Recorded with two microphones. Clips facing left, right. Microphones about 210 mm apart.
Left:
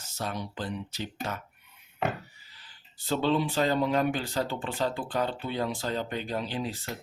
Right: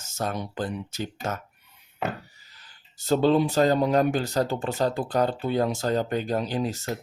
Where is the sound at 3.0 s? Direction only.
45° right (ahead or behind).